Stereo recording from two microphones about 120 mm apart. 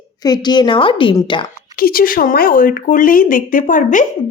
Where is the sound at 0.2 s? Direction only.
35° left (ahead or behind).